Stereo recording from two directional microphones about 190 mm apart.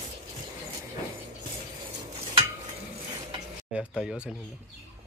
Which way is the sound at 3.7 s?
5° right (ahead or behind).